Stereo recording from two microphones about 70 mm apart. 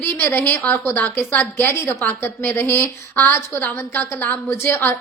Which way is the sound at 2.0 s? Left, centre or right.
Left.